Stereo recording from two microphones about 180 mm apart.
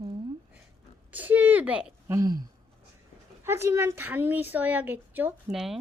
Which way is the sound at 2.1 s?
20° right (ahead or behind).